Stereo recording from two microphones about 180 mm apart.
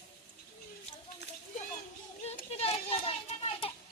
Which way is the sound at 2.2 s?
35° left (ahead or behind).